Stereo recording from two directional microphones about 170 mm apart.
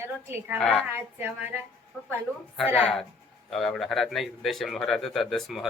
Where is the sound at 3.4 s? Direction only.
Centre (ahead or behind).